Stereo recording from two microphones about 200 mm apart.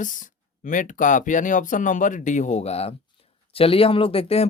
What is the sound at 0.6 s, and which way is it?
Speech, 40° left (ahead or behind).